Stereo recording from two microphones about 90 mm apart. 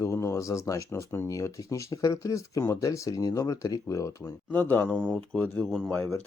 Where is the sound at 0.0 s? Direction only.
35° left (ahead or behind).